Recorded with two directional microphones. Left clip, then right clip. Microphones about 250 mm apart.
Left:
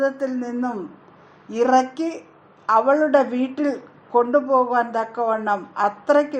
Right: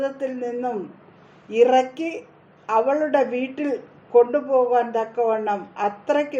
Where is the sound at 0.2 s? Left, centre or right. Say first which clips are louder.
Left 1 dB; left.